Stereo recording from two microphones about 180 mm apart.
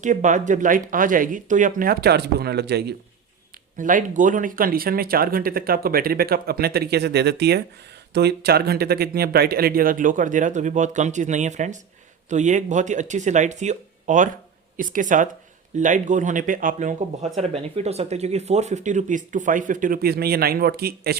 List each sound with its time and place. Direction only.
0.0 s speech: 45° right (ahead or behind); by 2.9 s 65° right (ahead or behind)
3.8 s speech: 45° right (ahead or behind)